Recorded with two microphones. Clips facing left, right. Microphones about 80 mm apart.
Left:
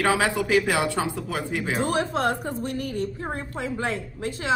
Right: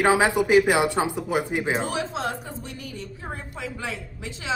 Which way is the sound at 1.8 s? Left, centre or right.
Left.